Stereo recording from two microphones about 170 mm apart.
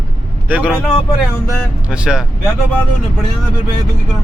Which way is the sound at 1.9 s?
5° right (ahead or behind).